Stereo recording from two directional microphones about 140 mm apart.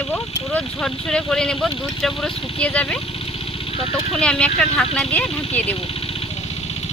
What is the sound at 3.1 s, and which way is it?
Vehicle, 40° left (ahead or behind).